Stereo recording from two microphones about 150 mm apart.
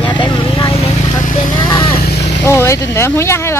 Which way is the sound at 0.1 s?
30° left (ahead or behind).